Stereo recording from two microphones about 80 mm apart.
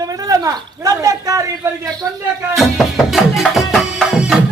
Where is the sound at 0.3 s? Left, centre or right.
Right.